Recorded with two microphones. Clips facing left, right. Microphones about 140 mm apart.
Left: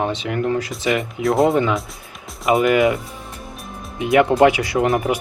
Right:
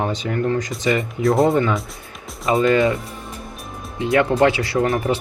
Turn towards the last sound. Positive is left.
turn(degrees=15)  # may be behind; listen again after turning